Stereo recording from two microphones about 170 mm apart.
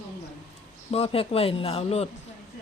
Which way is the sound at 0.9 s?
35° left (ahead or behind).